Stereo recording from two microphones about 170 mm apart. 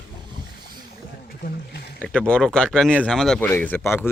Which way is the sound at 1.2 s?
65° left (ahead or behind).